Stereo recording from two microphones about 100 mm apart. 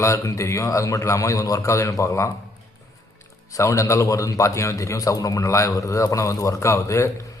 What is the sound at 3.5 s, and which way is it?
A man's voice, 30° left (ahead or behind).